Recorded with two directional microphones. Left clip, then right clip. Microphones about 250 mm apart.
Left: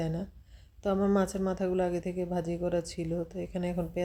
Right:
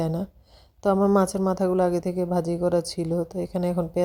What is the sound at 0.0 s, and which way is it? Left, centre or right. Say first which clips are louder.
A woman's voice: right 7 dB; right.